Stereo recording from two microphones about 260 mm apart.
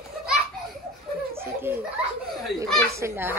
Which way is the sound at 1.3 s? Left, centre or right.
Centre.